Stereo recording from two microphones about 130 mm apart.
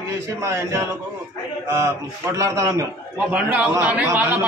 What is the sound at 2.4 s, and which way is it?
Speech, 25° right (ahead or behind).